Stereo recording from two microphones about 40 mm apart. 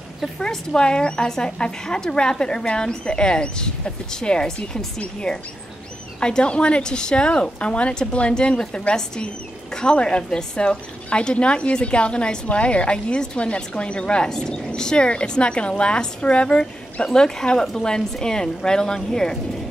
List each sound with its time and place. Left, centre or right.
0.4 s speech: centre